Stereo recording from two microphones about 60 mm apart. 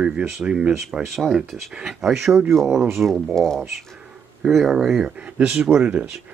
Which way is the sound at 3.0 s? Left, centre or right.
Centre.